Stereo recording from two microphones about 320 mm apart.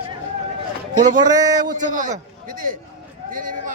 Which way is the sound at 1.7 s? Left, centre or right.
Right.